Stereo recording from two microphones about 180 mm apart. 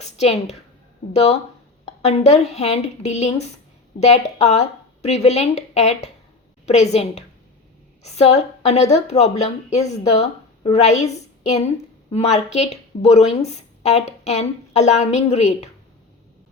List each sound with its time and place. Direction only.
0.0 s a woman's voice: 40° left (ahead or behind)